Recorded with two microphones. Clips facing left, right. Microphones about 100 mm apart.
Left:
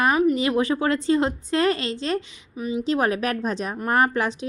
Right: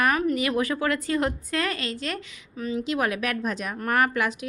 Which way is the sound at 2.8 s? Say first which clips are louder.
Left 5 dB; 35° left (ahead or behind).